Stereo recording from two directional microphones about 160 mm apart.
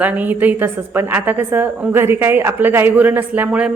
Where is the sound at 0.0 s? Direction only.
10° right (ahead or behind).